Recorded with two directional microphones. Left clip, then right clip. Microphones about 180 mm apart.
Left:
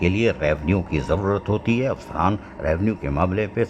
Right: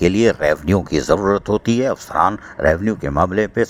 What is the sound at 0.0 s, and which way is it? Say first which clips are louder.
Speech: right 6 dB; 40° right (ahead or behind).